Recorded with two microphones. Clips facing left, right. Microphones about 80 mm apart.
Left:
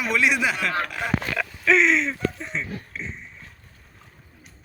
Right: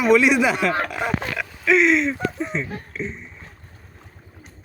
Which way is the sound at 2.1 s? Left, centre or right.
Centre.